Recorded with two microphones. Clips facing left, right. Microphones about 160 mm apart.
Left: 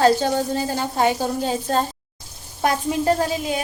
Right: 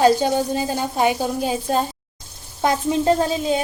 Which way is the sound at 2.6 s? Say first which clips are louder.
Right 2 dB; 20° right (ahead or behind).